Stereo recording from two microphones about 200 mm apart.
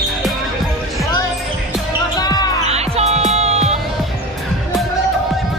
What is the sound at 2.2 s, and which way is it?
Basketball bounce, 20° left (ahead or behind).